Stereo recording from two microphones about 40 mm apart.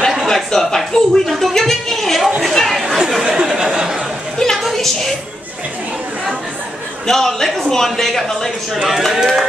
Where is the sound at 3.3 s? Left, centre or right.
Centre.